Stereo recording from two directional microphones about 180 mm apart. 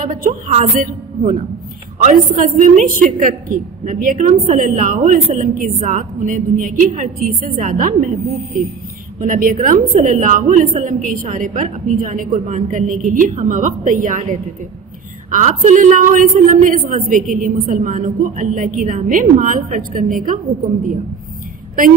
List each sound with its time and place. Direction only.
0.0 s a woman's voice: 45° right (ahead or behind)
9.2 s a woman's voice: 50° right (ahead or behind)